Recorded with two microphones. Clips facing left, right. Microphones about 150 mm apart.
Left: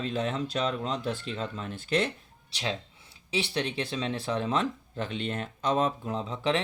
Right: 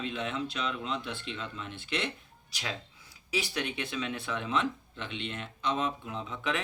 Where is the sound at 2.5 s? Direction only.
30° left (ahead or behind).